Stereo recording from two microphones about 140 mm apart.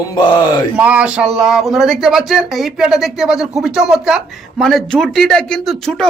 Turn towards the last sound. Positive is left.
turn(degrees=5)  # may be behind; listen again after turning